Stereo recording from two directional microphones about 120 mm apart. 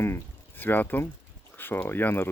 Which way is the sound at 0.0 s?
20° left (ahead or behind).